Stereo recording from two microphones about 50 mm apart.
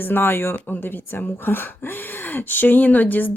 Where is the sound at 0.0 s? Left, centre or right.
Left.